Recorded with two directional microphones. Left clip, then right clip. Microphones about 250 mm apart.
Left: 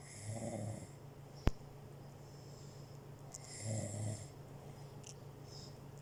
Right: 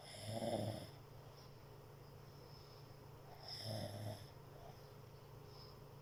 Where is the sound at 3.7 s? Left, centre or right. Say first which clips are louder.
Left 5 dB; centre.